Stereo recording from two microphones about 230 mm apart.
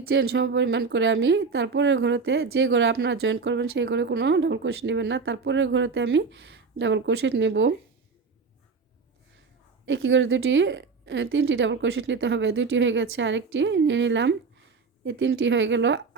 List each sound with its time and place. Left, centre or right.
0.1 s a woman's voice: right
9.8 s a woman's voice: right